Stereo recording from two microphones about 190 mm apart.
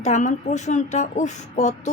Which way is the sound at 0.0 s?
40° left (ahead or behind).